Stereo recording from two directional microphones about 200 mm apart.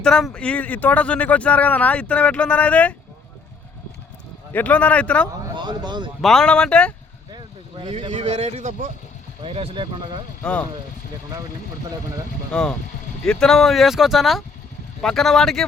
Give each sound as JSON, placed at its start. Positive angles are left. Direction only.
{"t": 0.0, "sound": "speech", "side_deg": 5}
{"t": 4.5, "sound": "speech", "side_deg": 5}
{"t": 5.5, "sound": "speech", "side_deg": -20}
{"t": 6.2, "sound": "speech", "side_deg": 5}
{"t": 7.3, "sound": "a man's voice", "side_deg": -25}
{"t": 10.4, "sound": "speech", "side_deg": 5}
{"t": 12.5, "sound": "speech", "side_deg": 5}